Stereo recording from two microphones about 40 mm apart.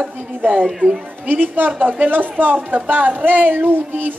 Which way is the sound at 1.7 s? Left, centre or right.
Right.